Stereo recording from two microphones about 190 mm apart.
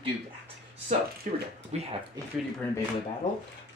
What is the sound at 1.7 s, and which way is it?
Speech, 35° right (ahead or behind).